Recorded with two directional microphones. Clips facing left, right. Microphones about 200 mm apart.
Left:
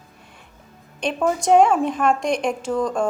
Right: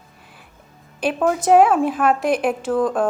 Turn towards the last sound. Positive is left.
turn(degrees=-5)  # may be behind; listen again after turning